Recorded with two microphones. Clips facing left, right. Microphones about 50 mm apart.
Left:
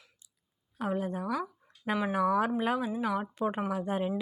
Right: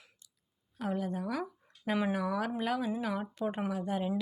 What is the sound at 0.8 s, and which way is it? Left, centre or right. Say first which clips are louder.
Speech: left 2 dB; left.